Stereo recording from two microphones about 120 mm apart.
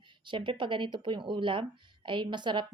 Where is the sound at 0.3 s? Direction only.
45° right (ahead or behind).